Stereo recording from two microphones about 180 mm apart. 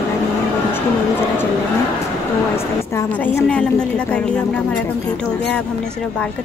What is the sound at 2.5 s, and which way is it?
A woman's voice, 15° left (ahead or behind).